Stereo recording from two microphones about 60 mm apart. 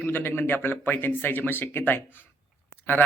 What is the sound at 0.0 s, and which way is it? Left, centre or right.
Speech, left.